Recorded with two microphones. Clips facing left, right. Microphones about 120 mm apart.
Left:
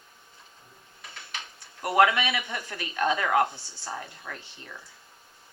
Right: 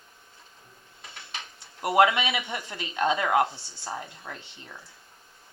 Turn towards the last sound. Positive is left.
turn(degrees=-20)  # may be behind; listen again after turning